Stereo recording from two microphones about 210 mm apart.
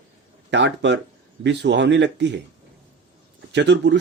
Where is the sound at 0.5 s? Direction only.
55° right (ahead or behind).